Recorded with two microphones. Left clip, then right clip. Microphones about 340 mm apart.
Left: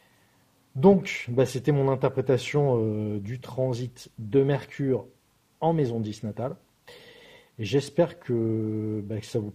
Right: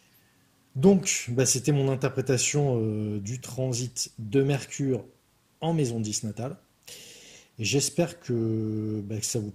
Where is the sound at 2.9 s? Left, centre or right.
Left.